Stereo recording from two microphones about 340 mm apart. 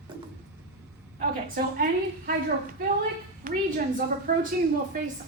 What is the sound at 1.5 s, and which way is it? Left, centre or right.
Speech, right.